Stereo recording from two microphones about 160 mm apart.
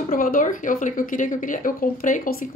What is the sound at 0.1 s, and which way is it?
Speech, 60° left (ahead or behind).